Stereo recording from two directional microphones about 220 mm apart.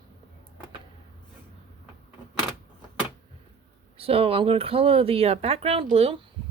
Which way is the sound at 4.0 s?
25° right (ahead or behind).